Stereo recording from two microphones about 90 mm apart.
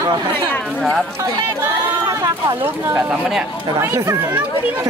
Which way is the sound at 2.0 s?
50° right (ahead or behind).